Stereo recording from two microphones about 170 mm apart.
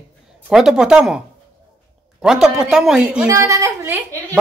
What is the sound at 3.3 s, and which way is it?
Speech, 20° right (ahead or behind).